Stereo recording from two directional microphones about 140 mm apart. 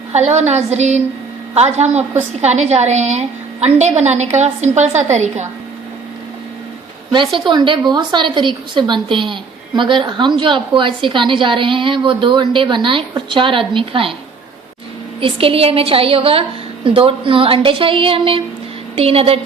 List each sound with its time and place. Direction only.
0.1 s a woman's voice: 55° right (ahead or behind)
7.3 s a woman's voice: 35° right (ahead or behind)
15.2 s a woman's voice: 40° right (ahead or behind)